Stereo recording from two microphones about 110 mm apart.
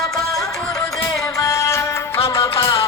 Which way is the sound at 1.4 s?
25° left (ahead or behind).